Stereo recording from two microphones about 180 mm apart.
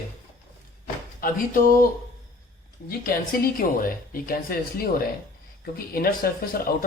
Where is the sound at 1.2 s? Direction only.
50° left (ahead or behind).